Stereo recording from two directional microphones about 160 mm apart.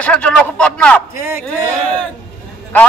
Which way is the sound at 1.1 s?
15° right (ahead or behind).